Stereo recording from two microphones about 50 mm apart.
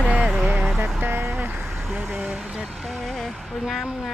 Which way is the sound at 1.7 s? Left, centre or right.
Centre.